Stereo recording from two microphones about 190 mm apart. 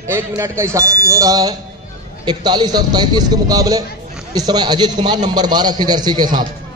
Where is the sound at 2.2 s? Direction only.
20° right (ahead or behind).